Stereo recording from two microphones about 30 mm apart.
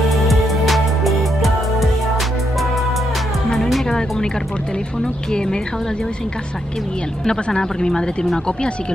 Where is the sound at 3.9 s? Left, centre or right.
Left.